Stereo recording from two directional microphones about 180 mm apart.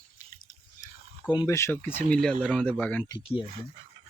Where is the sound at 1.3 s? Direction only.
20° left (ahead or behind).